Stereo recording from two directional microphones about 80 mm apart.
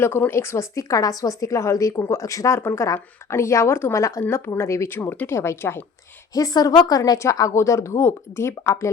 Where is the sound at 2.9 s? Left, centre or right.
Left.